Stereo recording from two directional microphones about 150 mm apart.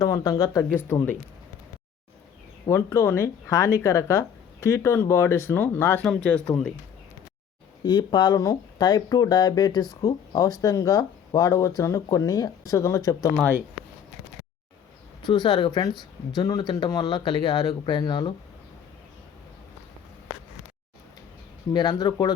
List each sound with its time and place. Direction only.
0.0 s speech: 25° left (ahead or behind)
2.6 s speech: 20° left (ahead or behind)
7.9 s speech: 30° left (ahead or behind)
15.2 s speech: 30° left (ahead or behind)
21.7 s speech: 30° left (ahead or behind)